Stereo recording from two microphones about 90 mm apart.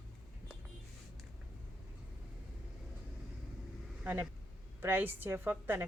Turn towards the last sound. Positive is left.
turn(degrees=-25)  # may be behind; listen again after turning